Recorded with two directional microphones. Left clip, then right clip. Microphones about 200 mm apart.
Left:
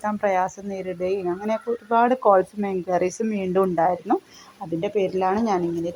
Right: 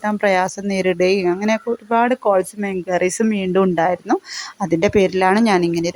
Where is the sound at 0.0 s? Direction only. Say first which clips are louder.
Right 5 dB; 25° right (ahead or behind).